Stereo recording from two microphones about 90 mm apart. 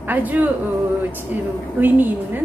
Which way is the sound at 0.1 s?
20° right (ahead or behind).